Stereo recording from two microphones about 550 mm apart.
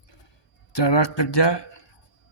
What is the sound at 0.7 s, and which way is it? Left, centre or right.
Speech, left.